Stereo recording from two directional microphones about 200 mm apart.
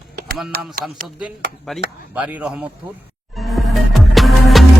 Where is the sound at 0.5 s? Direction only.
45° right (ahead or behind).